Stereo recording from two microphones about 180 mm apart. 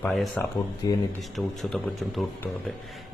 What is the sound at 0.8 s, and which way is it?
Speech, 20° left (ahead or behind).